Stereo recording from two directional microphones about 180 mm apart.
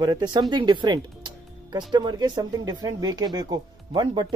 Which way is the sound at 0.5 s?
25° right (ahead or behind).